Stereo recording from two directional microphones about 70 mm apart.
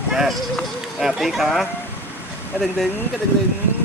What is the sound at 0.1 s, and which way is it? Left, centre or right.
Run, centre.